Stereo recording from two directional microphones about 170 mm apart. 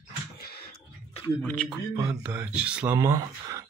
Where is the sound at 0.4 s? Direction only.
65° left (ahead or behind).